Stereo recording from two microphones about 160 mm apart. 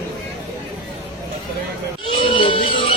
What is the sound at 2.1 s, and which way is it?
Music, 35° left (ahead or behind).